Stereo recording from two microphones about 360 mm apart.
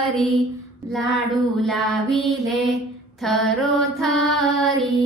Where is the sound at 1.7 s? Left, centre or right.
Centre.